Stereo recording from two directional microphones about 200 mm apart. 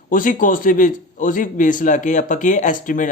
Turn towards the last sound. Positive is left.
turn(degrees=40)  # may be behind; listen again after turning